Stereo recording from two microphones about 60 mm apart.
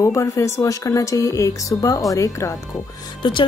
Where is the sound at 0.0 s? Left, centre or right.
Left.